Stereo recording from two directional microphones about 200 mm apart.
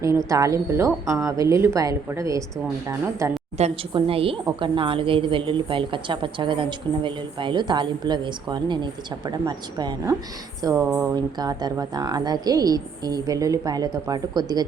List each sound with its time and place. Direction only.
0.3 s a woman's voice: 15° right (ahead or behind)
3.6 s a woman's voice: 30° right (ahead or behind)